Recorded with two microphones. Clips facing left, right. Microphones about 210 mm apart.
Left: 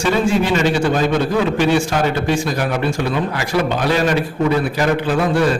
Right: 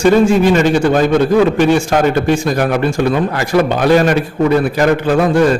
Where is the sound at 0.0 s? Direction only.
45° right (ahead or behind).